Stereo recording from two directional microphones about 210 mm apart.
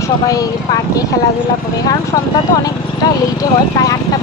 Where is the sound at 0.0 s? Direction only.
15° left (ahead or behind).